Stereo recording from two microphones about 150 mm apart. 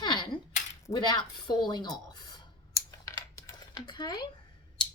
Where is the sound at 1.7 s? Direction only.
30° left (ahead or behind).